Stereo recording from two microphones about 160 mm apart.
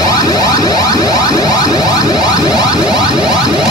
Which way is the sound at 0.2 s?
25° left (ahead or behind).